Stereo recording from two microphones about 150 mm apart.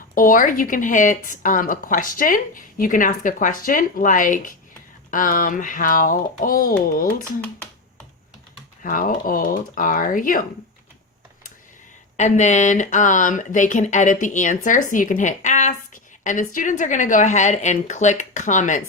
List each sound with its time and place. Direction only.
0.1 s a woman's voice: 65° left (ahead or behind)
8.8 s a woman's voice: 65° left (ahead or behind)
12.1 s a woman's voice: 50° left (ahead or behind)